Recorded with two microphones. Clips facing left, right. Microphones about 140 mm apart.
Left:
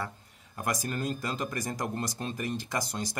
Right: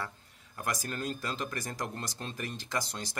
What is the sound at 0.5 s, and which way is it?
Speech, 15° left (ahead or behind).